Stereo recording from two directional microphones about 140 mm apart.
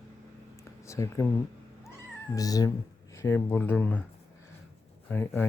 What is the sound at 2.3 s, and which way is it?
Speech, 25° left (ahead or behind).